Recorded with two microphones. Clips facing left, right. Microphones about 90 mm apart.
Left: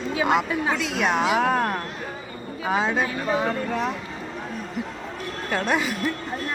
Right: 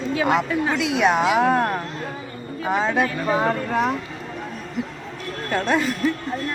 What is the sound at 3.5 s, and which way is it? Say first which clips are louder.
Speech: right 4 dB; 10° right (ahead or behind).